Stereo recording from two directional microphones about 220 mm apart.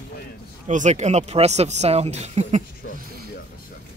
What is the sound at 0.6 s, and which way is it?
Speech, 35° right (ahead or behind).